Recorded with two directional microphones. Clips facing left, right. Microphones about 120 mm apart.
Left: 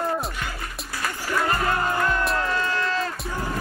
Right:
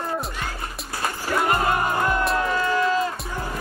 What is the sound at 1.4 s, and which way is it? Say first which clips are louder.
Music: right 2 dB; 20° right (ahead or behind).